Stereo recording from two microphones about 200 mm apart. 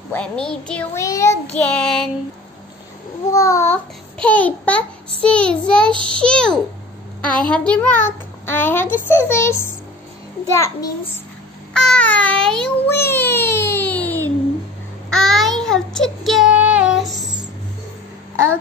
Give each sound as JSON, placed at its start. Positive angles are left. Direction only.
{"t": 0.1, "sound": "a child's voice", "side_deg": 5}
{"t": 1.7, "sound": "a child's voice", "side_deg": 5}
{"t": 3.3, "sound": "a child's voice", "side_deg": 15}
{"t": 11.7, "sound": "a sound", "side_deg": 5}
{"t": 15.0, "sound": "child singing", "side_deg": 0}